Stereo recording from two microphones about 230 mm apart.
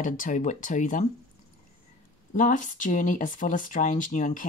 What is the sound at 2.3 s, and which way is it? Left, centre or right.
Speech, left.